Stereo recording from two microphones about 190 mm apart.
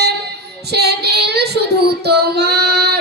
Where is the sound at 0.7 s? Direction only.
60° right (ahead or behind).